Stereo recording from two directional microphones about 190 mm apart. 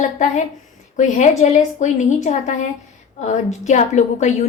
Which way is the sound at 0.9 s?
40° left (ahead or behind).